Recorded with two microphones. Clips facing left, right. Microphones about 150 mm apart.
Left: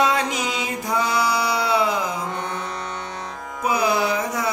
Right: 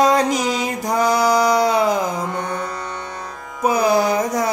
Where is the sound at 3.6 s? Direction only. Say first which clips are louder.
Right 5 dB; 40° right (ahead or behind).